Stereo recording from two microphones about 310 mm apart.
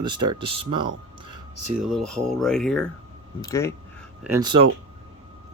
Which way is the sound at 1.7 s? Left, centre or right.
Centre.